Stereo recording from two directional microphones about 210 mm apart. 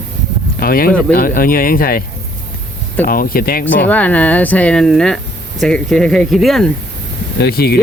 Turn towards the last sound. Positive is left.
turn(degrees=45)  # may be behind; listen again after turning